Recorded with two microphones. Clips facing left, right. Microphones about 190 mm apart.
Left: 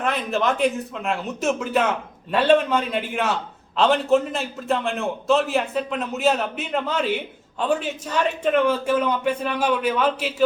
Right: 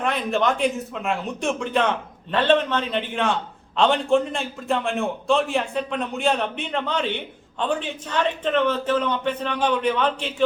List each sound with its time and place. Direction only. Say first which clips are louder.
0.0 s a man's voice: right 1 dB; centre (ahead or behind)